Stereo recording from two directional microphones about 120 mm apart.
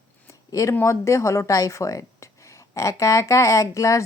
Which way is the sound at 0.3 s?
25° left (ahead or behind).